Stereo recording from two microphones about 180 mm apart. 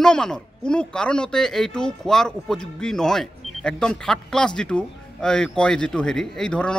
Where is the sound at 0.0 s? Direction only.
5° left (ahead or behind).